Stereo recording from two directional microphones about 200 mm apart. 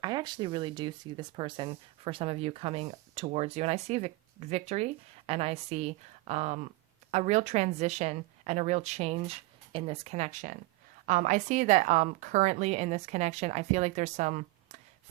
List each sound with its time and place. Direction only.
0.0 s speech: 20° right (ahead or behind)